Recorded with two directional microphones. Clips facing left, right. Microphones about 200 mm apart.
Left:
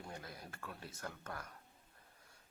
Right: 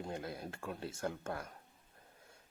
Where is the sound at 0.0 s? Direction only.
25° right (ahead or behind).